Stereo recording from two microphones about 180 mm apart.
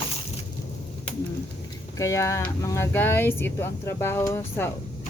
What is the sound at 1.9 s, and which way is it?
Speech, 15° left (ahead or behind).